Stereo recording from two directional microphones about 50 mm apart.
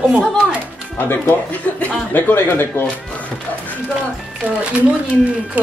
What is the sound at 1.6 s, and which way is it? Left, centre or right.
Speech, left.